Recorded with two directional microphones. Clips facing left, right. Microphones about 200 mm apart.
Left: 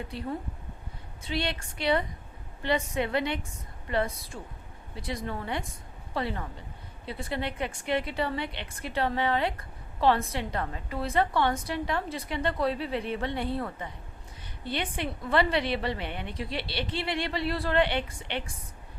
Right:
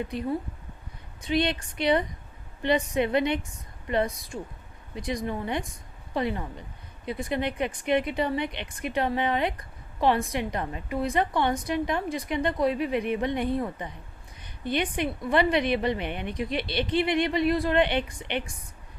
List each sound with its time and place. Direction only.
1.2 s a woman's voice: 20° right (ahead or behind)